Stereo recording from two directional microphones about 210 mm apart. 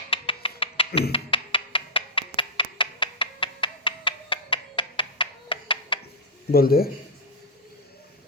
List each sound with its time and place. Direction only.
0.1 s music: 25° left (ahead or behind)
6.5 s speech: 45° left (ahead or behind)